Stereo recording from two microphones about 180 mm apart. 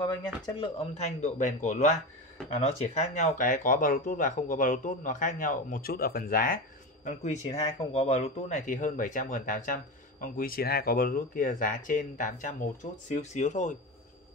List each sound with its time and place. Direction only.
0.0 s speech: 25° left (ahead or behind)
0.9 s speech: 40° left (ahead or behind)
7.1 s speech: 40° left (ahead or behind)